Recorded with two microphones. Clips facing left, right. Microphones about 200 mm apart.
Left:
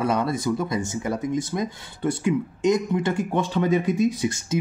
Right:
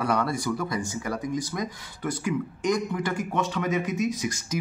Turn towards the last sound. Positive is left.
turn(degrees=25)  # may be behind; listen again after turning